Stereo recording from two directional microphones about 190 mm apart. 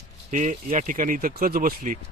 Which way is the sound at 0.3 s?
40° right (ahead or behind).